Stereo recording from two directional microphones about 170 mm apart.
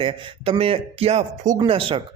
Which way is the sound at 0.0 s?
30° right (ahead or behind).